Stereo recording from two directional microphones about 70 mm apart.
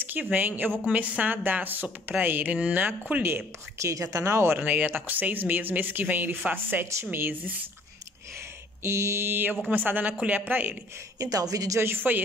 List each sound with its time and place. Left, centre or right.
0.0 s a woman's voice: right
3.7 s speech: right
4.6 s a woman's voice: right
8.8 s mantra: right
9.7 s a woman's voice: right
11.1 s a woman's voice: right
11.8 s a woman's voice: right